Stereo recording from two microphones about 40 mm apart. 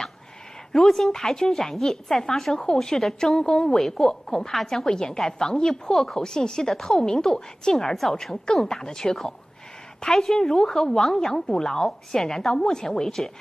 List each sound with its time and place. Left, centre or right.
0.7 s a woman's voice: centre